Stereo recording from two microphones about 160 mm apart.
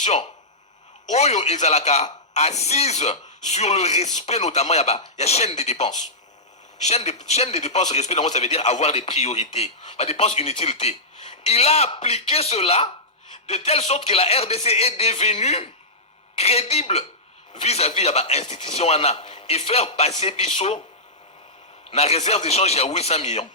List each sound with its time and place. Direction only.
0.0 s speech: 45° left (ahead or behind)
21.8 s speech: 40° left (ahead or behind)